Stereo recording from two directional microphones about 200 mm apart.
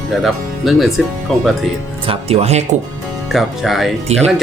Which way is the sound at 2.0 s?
30° right (ahead or behind).